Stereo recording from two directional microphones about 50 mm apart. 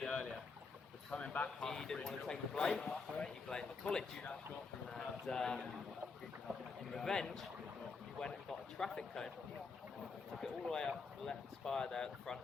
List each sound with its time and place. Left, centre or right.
0.0 s boat: centre
1.1 s speech: left
1.6 s speech: centre
6.9 s speech: centre
8.4 s speech: centre
10.3 s speech: centre